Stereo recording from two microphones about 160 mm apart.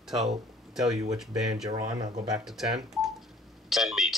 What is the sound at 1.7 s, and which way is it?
Speech, 25° right (ahead or behind).